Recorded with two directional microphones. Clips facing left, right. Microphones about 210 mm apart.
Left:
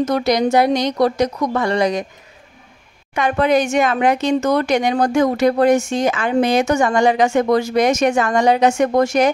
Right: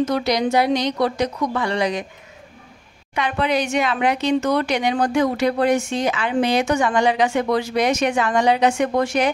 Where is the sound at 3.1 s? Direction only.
45° left (ahead or behind).